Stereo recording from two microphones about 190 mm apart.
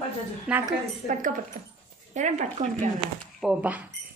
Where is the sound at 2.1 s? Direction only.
40° right (ahead or behind).